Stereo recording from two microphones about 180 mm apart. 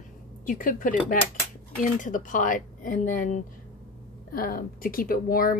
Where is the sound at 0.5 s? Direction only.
50° left (ahead or behind).